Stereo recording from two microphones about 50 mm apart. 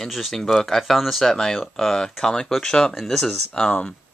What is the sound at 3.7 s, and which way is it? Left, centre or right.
Speech, left.